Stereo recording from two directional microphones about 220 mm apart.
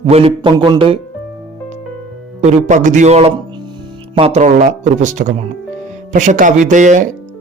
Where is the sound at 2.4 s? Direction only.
35° right (ahead or behind).